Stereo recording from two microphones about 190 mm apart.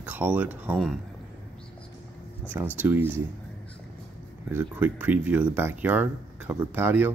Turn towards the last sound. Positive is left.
turn(degrees=-10)  # may be behind; listen again after turning